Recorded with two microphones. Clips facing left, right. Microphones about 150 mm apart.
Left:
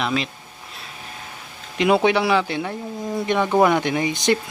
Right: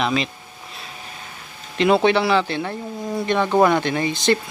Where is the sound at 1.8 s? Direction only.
10° left (ahead or behind).